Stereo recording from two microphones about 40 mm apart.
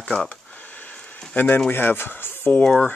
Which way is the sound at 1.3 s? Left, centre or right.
Left.